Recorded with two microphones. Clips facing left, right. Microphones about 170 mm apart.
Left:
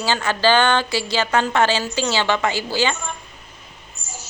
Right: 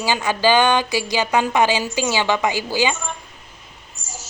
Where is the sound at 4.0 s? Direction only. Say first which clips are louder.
Even; 90° right.